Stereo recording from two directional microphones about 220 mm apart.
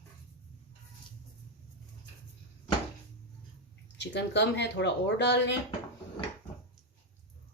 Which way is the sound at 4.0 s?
50° left (ahead or behind).